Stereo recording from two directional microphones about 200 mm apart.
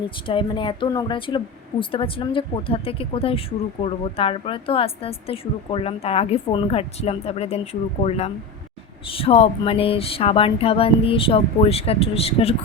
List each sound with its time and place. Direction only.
0.3 s speech: 25° left (ahead or behind)